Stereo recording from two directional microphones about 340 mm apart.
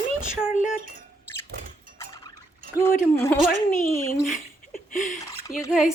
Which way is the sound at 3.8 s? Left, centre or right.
Centre.